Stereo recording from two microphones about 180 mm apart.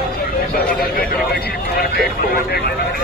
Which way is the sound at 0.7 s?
60° left (ahead or behind).